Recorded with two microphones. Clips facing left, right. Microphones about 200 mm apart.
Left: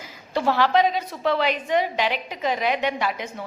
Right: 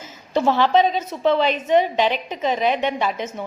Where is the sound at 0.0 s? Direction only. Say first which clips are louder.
Right 4 dB; 20° right (ahead or behind).